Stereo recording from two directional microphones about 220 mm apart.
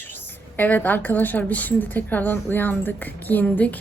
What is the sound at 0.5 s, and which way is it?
A woman's voice, 10° left (ahead or behind).